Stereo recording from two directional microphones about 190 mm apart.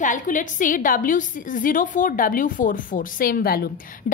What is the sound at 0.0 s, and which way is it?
A woman's voice, 40° left (ahead or behind).